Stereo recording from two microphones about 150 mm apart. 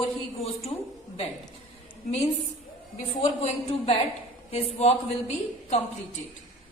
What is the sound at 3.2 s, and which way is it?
A man's voice, 40° left (ahead or behind).